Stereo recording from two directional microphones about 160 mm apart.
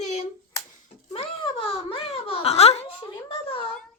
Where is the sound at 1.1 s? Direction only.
30° left (ahead or behind).